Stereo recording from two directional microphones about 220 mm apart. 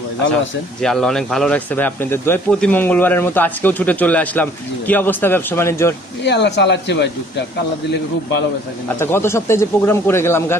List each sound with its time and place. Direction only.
0.8 s speech: centre (ahead or behind)
6.2 s speech: 50° left (ahead or behind)
9.0 s speech: 10° left (ahead or behind)